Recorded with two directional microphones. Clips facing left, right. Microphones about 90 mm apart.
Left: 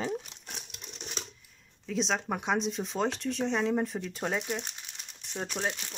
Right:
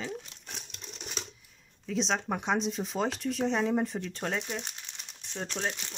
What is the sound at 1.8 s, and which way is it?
Speech, centre (ahead or behind).